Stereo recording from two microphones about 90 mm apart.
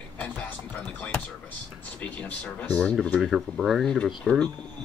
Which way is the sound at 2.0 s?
15° left (ahead or behind).